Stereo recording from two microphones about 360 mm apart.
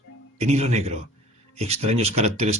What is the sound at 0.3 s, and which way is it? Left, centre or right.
Speech, centre.